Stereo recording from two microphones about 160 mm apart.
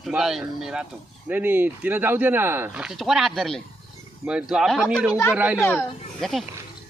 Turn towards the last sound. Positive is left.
turn(degrees=0)  # may be behind; listen again after turning